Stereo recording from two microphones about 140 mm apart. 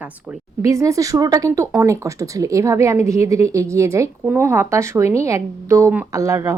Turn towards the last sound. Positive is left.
turn(degrees=-20)  # may be behind; listen again after turning